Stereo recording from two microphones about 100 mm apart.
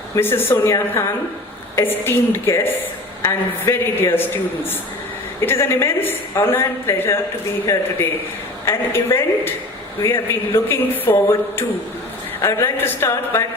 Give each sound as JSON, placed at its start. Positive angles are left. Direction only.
{"t": 0.2, "sound": "a woman's voice", "side_deg": 20}
{"t": 5.4, "sound": "a woman's voice", "side_deg": 25}